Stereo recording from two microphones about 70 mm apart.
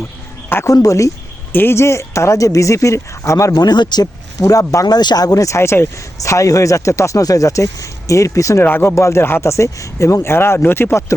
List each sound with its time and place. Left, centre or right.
0.7 s speech: left
1.5 s speech: left
3.5 s speech: left
4.9 s speech: left